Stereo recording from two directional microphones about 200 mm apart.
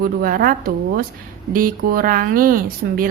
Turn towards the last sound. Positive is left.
turn(degrees=-45)  # may be behind; listen again after turning